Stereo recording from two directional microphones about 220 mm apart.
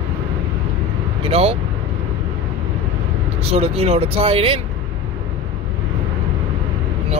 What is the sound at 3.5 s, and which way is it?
Speech, 30° right (ahead or behind).